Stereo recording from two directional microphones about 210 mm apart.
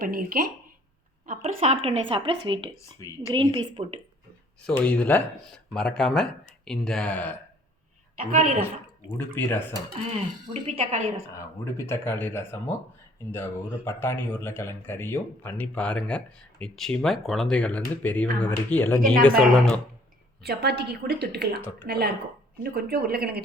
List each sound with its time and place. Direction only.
0.1 s a woman's voice: 45° right (ahead or behind)
1.3 s speech: 30° right (ahead or behind)
4.6 s speech: 5° left (ahead or behind)
8.3 s a woman's voice: 35° right (ahead or behind)
9.1 s speech: 10° left (ahead or behind)
10.5 s a woman's voice: 30° right (ahead or behind)
11.3 s speech: 10° left (ahead or behind)
20.4 s a woman's voice: 50° right (ahead or behind)